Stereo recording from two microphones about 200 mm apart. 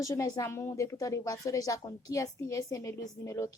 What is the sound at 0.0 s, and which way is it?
A woman's voice, 15° left (ahead or behind).